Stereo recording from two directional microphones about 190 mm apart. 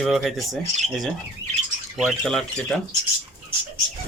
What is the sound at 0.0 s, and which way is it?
Speech, centre (ahead or behind).